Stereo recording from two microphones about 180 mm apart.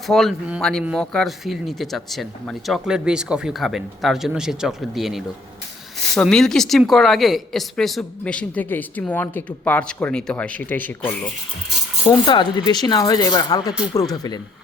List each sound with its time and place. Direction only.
0.1 s speech: centre (ahead or behind)
12.2 s speech: 25° left (ahead or behind)